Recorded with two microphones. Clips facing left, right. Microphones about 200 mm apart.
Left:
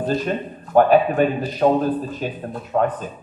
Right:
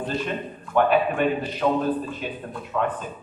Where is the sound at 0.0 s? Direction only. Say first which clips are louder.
Left 5 dB; 40° left (ahead or behind).